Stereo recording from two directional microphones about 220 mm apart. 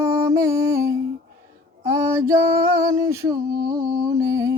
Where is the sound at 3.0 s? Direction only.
15° right (ahead or behind).